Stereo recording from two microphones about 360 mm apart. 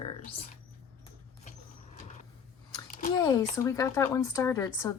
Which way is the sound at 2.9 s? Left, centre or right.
Left.